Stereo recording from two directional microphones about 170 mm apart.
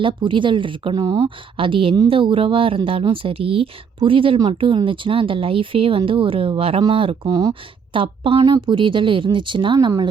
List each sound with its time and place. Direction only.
0.0 s speech: 30° right (ahead or behind)